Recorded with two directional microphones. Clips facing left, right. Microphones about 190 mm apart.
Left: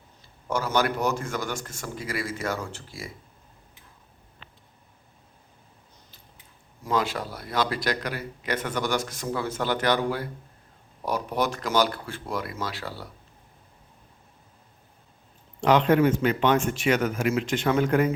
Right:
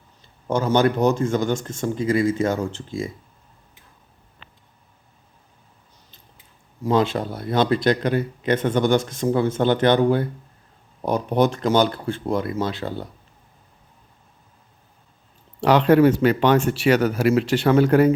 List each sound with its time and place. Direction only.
0.5 s speech: 25° right (ahead or behind)
6.8 s speech: 25° right (ahead or behind)
15.6 s speech: 35° right (ahead or behind)